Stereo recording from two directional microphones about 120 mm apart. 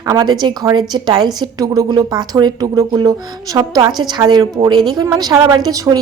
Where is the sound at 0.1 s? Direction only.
35° right (ahead or behind).